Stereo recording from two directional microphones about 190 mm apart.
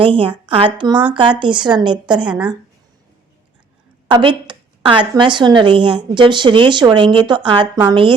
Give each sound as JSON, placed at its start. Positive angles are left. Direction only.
{"t": 0.0, "sound": "a woman's voice", "side_deg": -25}
{"t": 4.1, "sound": "a woman's voice", "side_deg": -25}